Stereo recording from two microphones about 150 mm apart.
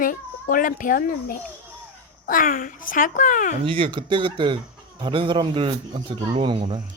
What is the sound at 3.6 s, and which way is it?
Speech, 35° right (ahead or behind).